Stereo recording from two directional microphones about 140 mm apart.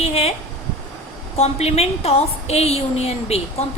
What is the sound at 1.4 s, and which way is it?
A woman's voice, 45° left (ahead or behind).